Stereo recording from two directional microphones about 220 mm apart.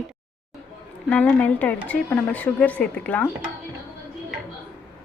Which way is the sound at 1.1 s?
5° left (ahead or behind).